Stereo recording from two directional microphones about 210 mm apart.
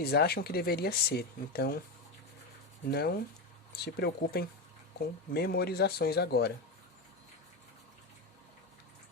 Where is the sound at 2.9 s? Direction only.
45° left (ahead or behind).